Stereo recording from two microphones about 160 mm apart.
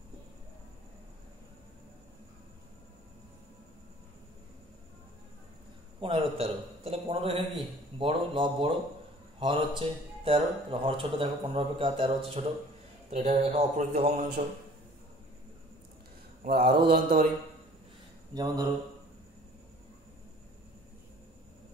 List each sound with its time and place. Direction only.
5.9 s a man's voice: 35° right (ahead or behind)
13.7 s a man's voice: 65° right (ahead or behind)
16.4 s mantra: 75° right (ahead or behind)
18.3 s mantra: 25° right (ahead or behind)